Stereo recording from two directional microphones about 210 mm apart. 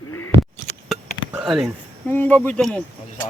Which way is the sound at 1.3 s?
5° right (ahead or behind).